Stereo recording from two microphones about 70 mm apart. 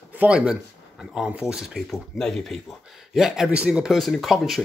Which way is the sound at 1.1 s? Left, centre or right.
Centre.